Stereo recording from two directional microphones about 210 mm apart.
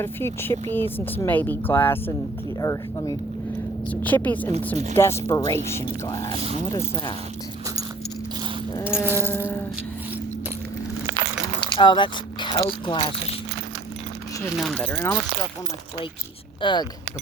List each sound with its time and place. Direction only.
0.0 s speech: 10° left (ahead or behind)
8.8 s sheep: 5° right (ahead or behind)
9.3 s music: 10° left (ahead or behind)
11.8 s speech: 20° left (ahead or behind)
14.5 s speech: centre (ahead or behind)
16.6 s speech: 20° left (ahead or behind)